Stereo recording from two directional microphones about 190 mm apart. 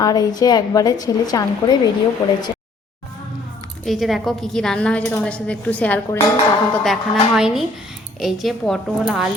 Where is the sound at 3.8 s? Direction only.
Centre (ahead or behind).